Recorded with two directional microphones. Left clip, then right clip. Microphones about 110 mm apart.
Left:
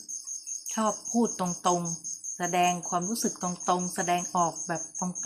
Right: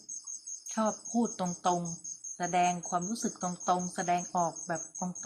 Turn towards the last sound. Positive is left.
turn(degrees=-20)  # may be behind; listen again after turning